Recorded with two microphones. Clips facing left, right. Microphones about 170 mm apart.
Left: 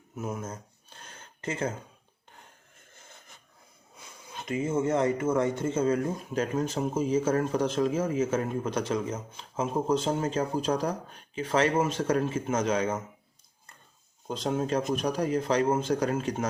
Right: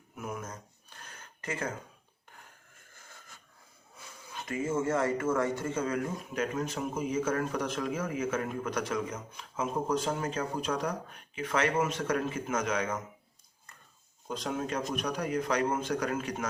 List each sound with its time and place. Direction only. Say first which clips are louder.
0.2 s a sound: left 4 dB; 25° left (ahead or behind)
3.9 s speech: left 1 dB; 20° left (ahead or behind)
14.3 s speech: left 5 dB; 30° left (ahead or behind)